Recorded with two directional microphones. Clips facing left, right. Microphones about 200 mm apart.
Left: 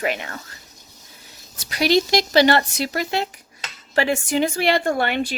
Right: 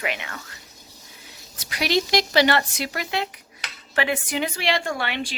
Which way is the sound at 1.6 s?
40° left (ahead or behind).